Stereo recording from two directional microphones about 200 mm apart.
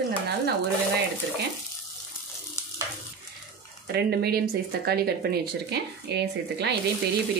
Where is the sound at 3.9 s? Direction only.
55° right (ahead or behind).